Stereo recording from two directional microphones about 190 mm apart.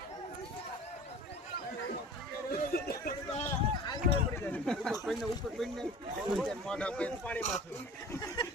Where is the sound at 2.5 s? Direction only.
50° left (ahead or behind).